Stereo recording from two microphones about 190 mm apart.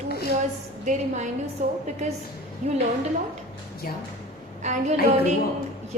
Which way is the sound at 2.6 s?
40° right (ahead or behind).